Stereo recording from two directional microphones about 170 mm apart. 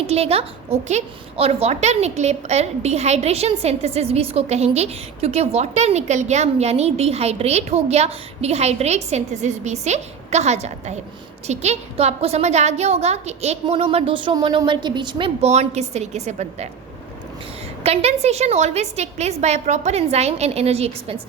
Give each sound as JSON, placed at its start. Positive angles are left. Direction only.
{"t": 0.1, "sound": "a woman's voice", "side_deg": -35}
{"t": 17.8, "sound": "a woman's voice", "side_deg": -40}